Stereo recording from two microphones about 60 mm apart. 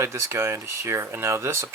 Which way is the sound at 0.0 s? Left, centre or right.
Right.